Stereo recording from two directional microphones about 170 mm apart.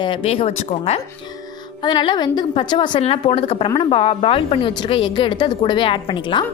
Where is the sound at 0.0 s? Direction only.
30° left (ahead or behind).